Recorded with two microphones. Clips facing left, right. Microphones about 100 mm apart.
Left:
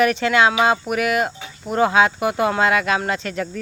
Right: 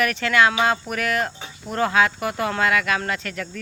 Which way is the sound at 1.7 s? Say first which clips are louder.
Left 4 dB; 20° left (ahead or behind).